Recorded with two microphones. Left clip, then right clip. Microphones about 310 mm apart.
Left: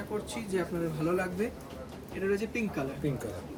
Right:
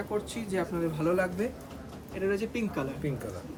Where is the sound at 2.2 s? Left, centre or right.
Centre.